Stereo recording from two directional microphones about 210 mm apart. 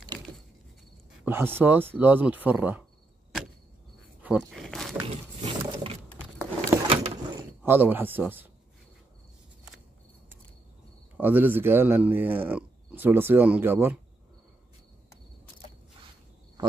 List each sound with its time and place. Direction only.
1.2 s speech: 10° right (ahead or behind)
4.2 s wild animals: 5° right (ahead or behind)
5.0 s a sound: 25° right (ahead or behind)
7.6 s speech: 10° right (ahead or behind)
11.1 s speech: 10° right (ahead or behind)